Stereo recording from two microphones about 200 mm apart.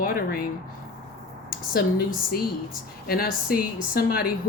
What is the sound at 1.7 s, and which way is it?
Speech, 45° left (ahead or behind).